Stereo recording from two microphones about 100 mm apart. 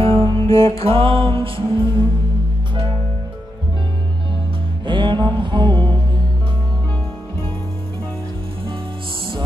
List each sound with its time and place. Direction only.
0.0 s music: 65° right (ahead or behind)
4.8 s music: 50° right (ahead or behind)